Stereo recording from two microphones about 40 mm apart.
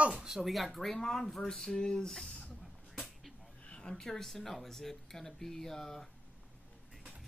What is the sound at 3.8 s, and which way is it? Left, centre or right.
Speech, centre.